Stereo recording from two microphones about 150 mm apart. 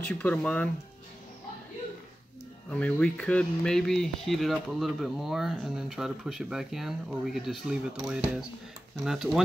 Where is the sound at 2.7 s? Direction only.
5° left (ahead or behind).